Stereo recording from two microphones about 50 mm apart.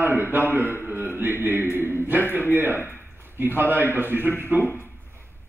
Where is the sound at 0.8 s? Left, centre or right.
Right.